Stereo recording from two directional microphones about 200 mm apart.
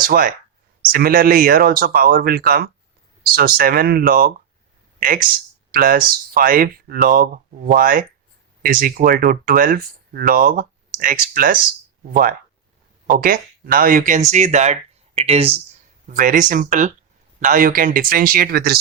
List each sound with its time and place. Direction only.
0.0 s speech: 45° right (ahead or behind)
13.1 s speech: 45° right (ahead or behind); by 15.6 s 30° right (ahead or behind)
16.0 s speech: 40° right (ahead or behind)